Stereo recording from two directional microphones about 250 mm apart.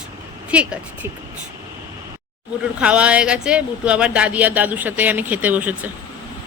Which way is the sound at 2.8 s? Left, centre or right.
Centre.